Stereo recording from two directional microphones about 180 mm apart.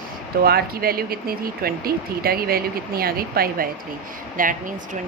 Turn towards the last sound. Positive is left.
turn(degrees=-50)  # may be behind; listen again after turning